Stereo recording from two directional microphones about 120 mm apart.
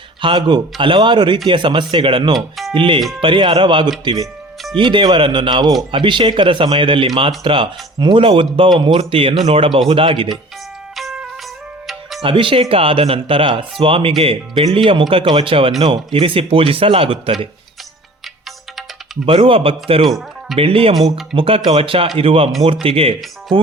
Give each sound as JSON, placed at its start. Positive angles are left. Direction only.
{"t": 0.2, "sound": "a man's voice", "side_deg": -40}
{"t": 10.9, "sound": "music", "side_deg": -5}
{"t": 12.2, "sound": "speech", "side_deg": -45}
{"t": 19.2, "sound": "speech", "side_deg": -50}
{"t": 20.1, "sound": "speech", "side_deg": 0}
{"t": 20.6, "sound": "speech", "side_deg": -50}